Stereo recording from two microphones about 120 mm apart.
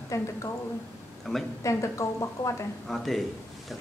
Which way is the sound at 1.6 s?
25° left (ahead or behind).